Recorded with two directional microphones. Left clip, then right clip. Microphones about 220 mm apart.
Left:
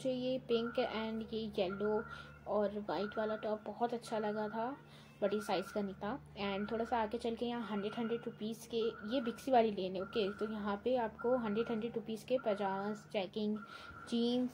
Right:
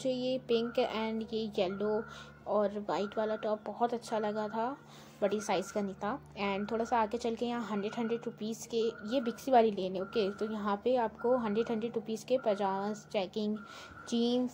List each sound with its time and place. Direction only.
0.0 s a woman's voice: 20° right (ahead or behind)